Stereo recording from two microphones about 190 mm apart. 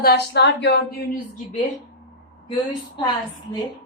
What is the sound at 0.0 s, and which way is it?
A woman's voice, 60° left (ahead or behind).